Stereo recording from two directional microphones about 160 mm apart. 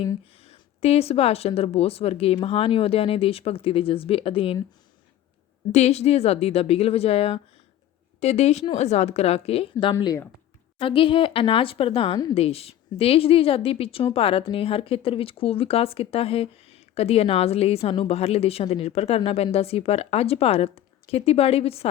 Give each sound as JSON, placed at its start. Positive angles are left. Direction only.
{"t": 0.3, "sound": "speech", "side_deg": 40}
{"t": 5.7, "sound": "a woman's voice", "side_deg": 40}
{"t": 10.8, "sound": "speech", "side_deg": 35}